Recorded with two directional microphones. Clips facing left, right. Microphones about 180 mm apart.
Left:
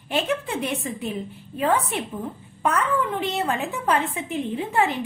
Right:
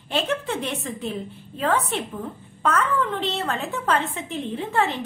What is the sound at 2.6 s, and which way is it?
A woman's voice, 15° left (ahead or behind).